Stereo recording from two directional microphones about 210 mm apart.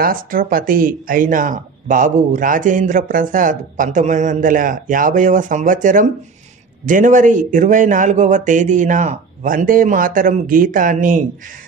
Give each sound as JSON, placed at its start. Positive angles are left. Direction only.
{"t": 0.0, "sound": "speech", "side_deg": -40}